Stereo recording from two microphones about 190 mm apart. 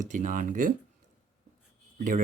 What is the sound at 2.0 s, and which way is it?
Speech, 45° right (ahead or behind).